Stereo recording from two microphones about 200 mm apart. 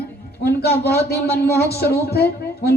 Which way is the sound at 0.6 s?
50° left (ahead or behind).